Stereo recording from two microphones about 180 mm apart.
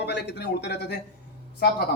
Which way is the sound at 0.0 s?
65° left (ahead or behind).